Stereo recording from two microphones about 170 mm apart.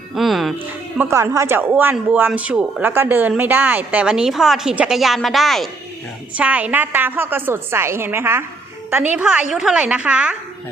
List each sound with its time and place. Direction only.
0.1 s music: centre (ahead or behind)
0.9 s speech: 15° right (ahead or behind)